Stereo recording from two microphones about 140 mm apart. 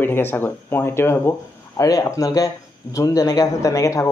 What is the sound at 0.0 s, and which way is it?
Speech, 15° left (ahead or behind).